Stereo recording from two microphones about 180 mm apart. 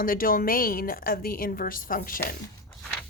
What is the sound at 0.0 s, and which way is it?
A woman's voice, 50° left (ahead or behind).